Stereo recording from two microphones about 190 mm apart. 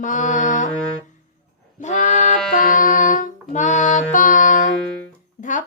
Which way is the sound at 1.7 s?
40° left (ahead or behind).